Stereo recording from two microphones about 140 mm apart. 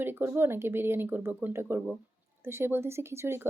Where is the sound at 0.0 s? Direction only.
15° right (ahead or behind).